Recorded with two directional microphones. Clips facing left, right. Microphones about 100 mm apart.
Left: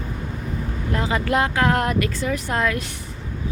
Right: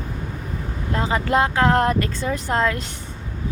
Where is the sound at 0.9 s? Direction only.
30° right (ahead or behind).